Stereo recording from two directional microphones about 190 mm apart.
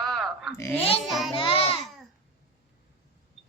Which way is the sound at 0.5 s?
15° left (ahead or behind).